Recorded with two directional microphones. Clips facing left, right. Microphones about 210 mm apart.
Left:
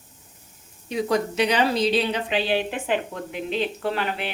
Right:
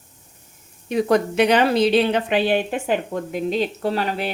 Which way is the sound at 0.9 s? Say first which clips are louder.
Right 5 dB; 55° right (ahead or behind).